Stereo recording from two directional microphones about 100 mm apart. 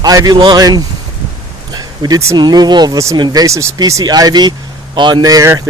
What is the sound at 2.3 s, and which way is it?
Speech, 45° right (ahead or behind).